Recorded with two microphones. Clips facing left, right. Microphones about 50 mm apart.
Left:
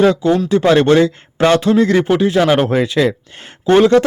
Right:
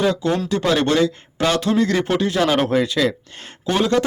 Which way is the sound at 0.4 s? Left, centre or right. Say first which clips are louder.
Left 8 dB; left.